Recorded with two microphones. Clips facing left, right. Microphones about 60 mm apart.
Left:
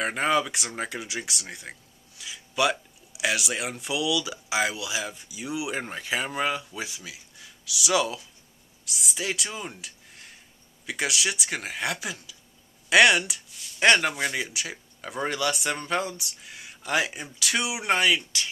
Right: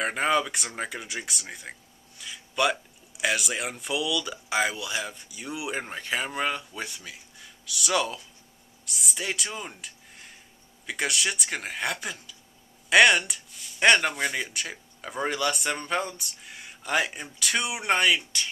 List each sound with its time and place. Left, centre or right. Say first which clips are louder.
0.0 s speech: even; centre